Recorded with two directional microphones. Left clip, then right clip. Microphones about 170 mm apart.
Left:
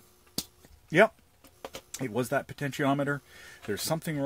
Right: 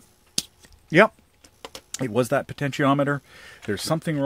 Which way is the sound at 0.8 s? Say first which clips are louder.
Right 5 dB; 40° right (ahead or behind).